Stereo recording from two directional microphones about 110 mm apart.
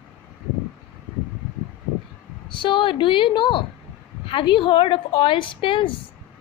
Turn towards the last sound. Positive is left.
turn(degrees=50)  # may be behind; listen again after turning